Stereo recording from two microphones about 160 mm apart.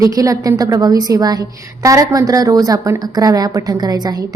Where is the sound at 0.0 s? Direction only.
20° right (ahead or behind).